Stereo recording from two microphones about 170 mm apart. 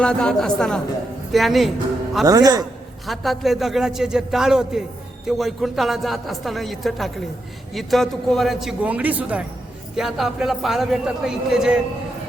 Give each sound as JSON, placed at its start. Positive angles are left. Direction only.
{"t": 0.0, "sound": "a man's voice", "side_deg": 5}
{"t": 2.2, "sound": "a man's voice", "side_deg": -20}
{"t": 3.1, "sound": "a man's voice", "side_deg": 0}